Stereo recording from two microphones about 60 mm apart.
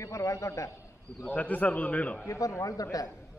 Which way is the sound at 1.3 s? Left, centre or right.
Left.